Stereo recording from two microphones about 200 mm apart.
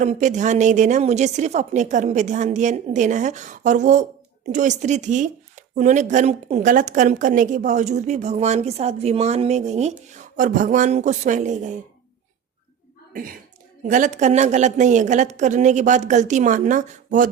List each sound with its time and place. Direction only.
0.0 s speech: 35° right (ahead or behind)
13.8 s speech: 40° right (ahead or behind)